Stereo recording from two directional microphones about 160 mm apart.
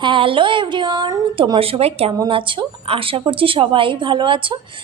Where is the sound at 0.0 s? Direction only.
35° right (ahead or behind).